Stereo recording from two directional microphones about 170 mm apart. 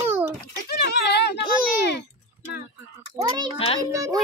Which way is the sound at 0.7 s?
70° left (ahead or behind).